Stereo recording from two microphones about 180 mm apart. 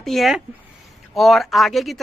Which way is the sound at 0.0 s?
Centre (ahead or behind).